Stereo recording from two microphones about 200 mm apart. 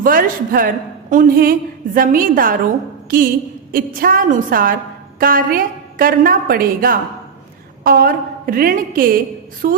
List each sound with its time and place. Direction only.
0.0 s a woman's voice: 45° right (ahead or behind)